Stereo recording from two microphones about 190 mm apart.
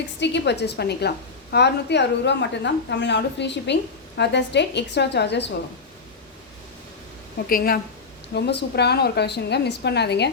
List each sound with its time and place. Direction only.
0.2 s a woman's voice: 65° left (ahead or behind)
7.4 s a woman's voice: 50° left (ahead or behind)
8.3 s a woman's voice: 60° left (ahead or behind)